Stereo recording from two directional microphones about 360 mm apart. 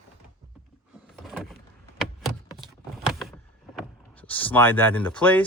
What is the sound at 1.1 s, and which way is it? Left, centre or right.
Door, centre.